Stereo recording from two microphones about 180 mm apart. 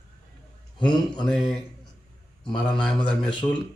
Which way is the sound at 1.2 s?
Centre (ahead or behind).